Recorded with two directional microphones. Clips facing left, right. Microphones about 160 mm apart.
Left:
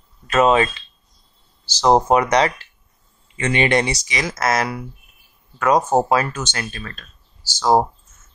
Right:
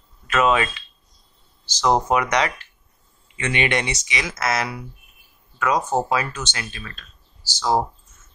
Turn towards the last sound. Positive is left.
turn(degrees=50)  # may be behind; listen again after turning